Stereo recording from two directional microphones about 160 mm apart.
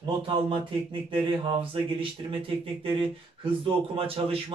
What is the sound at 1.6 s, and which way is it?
Speech, 35° right (ahead or behind).